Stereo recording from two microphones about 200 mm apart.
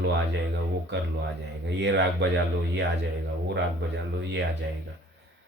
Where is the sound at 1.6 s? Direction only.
60° right (ahead or behind).